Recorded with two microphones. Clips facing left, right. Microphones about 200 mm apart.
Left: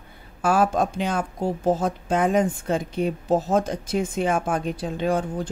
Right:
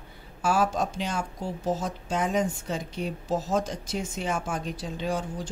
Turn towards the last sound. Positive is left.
turn(degrees=55)  # may be behind; listen again after turning